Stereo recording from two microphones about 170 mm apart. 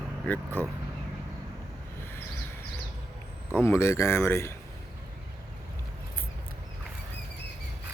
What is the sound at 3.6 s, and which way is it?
Speech, 15° left (ahead or behind).